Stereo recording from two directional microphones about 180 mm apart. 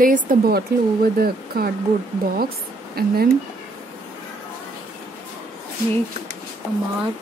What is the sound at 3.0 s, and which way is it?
Speech, 60° right (ahead or behind).